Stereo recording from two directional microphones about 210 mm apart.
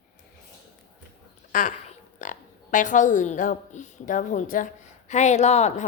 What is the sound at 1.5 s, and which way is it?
A woman's voice, 40° left (ahead or behind).